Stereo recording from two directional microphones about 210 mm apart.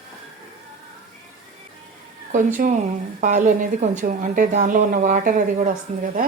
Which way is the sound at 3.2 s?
35° right (ahead or behind).